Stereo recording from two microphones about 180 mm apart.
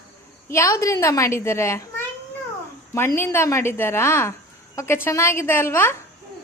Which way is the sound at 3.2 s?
15° left (ahead or behind).